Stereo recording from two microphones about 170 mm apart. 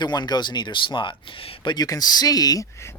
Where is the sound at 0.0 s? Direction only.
25° left (ahead or behind).